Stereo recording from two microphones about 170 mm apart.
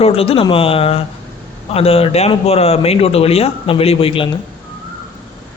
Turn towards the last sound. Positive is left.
turn(degrees=30)  # may be behind; listen again after turning